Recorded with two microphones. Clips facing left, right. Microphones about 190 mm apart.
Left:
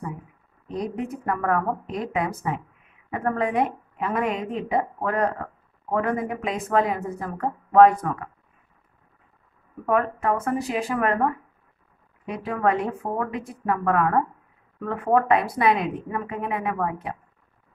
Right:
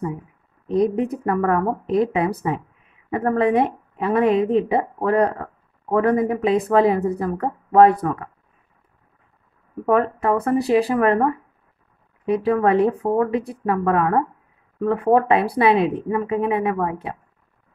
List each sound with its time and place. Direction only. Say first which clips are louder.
0.7 s a woman's voice: right 9 dB; 35° right (ahead or behind)
9.8 s a woman's voice: right 4 dB; 35° right (ahead or behind)
12.3 s a woman's voice: right 6 dB; 35° right (ahead or behind)
15.0 s a woman's voice: right 2 dB; 30° right (ahead or behind)